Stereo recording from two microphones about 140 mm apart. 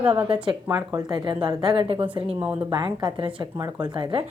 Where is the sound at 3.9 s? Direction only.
35° right (ahead or behind).